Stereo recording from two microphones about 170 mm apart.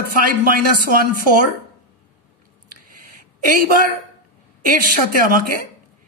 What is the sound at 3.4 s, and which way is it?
Speech, 55° right (ahead or behind).